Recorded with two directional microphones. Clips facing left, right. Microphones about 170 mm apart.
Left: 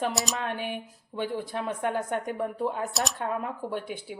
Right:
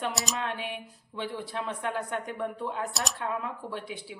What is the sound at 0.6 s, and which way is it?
A woman's voice, 45° left (ahead or behind).